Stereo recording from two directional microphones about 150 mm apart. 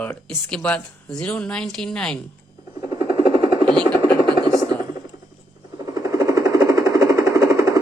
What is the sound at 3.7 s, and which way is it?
Helicopter, 5° left (ahead or behind).